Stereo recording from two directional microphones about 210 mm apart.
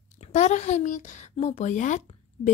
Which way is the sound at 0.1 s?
35° left (ahead or behind).